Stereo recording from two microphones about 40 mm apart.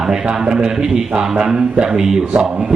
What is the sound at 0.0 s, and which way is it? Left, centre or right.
A man's voice, right.